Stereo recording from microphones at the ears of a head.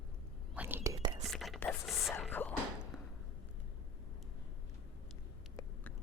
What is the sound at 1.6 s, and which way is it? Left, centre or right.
Music, left.